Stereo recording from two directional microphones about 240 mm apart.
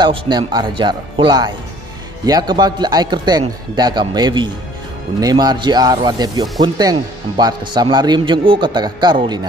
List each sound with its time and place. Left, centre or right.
0.0 s a man's voice: centre